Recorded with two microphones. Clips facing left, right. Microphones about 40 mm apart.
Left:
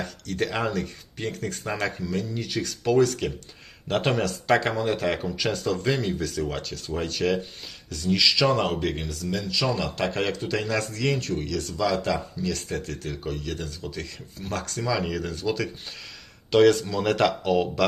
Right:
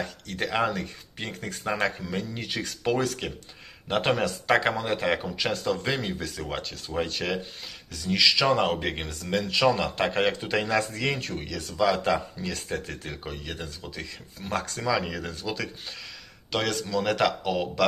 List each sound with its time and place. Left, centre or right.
0.0 s speech: centre
2.0 s speech: right; by 8.9 s centre
8.9 s speech: right; by 11.9 s centre
11.9 s speech: right; by 17.8 s centre